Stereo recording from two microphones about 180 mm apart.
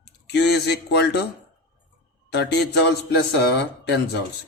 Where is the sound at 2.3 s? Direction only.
65° left (ahead or behind).